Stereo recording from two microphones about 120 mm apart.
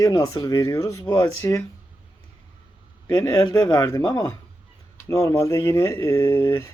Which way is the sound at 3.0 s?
35° left (ahead or behind).